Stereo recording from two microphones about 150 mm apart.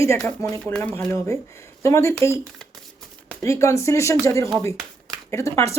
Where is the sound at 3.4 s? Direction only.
20° left (ahead or behind).